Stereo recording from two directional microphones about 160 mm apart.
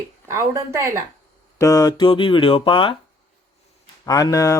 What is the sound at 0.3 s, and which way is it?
Speech, 20° right (ahead or behind).